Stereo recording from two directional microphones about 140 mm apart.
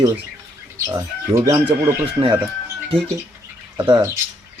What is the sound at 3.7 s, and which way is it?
Speech, 30° right (ahead or behind).